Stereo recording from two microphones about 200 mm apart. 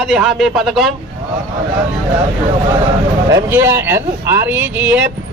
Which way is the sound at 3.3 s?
10° right (ahead or behind).